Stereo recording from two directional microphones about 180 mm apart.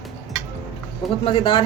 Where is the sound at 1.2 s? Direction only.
30° left (ahead or behind).